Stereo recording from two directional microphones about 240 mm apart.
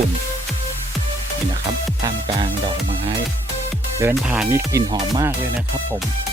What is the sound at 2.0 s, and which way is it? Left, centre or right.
Music, right.